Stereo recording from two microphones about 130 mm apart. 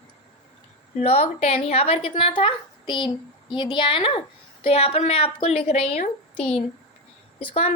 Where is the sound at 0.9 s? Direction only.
55° left (ahead or behind).